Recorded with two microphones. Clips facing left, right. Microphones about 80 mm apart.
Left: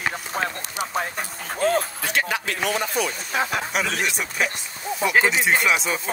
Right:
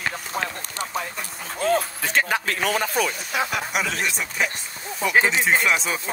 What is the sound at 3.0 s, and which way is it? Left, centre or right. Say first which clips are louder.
Speech: even; left.